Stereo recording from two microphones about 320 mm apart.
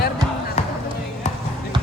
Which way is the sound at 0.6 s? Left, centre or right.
Left.